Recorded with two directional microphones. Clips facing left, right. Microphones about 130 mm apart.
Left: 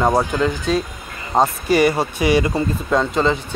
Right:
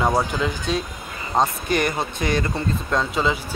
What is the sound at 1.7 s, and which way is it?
Speech, 5° left (ahead or behind).